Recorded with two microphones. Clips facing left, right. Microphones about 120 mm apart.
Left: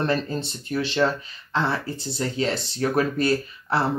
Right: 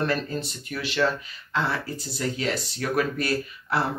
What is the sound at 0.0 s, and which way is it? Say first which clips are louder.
Speech: left 2 dB; 30° left (ahead or behind).